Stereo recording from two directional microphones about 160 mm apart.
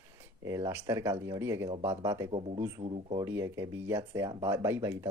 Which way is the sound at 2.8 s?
35° right (ahead or behind).